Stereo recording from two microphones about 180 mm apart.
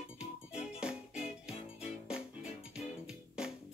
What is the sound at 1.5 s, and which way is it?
Music, 35° left (ahead or behind).